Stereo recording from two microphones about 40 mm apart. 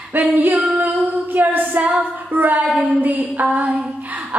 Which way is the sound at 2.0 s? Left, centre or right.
Right.